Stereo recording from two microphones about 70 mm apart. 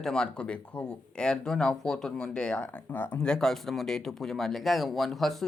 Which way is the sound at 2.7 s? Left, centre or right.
Left.